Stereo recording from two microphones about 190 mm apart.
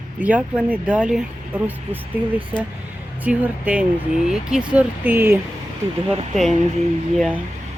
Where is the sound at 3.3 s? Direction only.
5° right (ahead or behind).